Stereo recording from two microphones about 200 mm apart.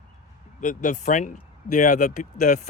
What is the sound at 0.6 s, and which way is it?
Speech, 40° left (ahead or behind).